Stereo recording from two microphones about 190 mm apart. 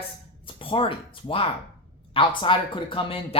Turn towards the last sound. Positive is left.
turn(degrees=30)  # may be behind; listen again after turning